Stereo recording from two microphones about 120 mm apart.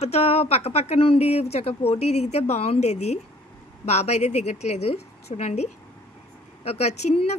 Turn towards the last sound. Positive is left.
turn(degrees=65)  # may be behind; listen again after turning